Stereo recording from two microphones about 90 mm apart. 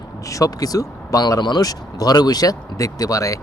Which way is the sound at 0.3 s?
40° left (ahead or behind).